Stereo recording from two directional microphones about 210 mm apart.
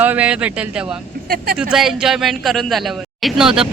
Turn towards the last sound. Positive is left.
turn(degrees=0)  # may be behind; listen again after turning